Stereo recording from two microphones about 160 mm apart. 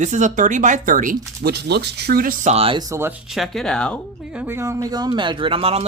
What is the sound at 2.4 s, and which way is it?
Speech, 40° right (ahead or behind).